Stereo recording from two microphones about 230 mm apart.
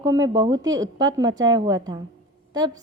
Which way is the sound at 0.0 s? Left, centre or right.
Centre.